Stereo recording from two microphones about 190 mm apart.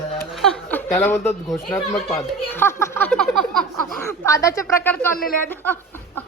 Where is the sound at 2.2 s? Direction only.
10° left (ahead or behind).